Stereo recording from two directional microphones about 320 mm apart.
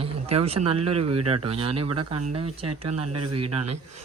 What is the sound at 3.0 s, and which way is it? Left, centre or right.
Speech, right.